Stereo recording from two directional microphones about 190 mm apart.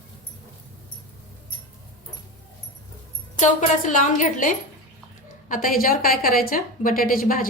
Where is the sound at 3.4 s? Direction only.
40° left (ahead or behind).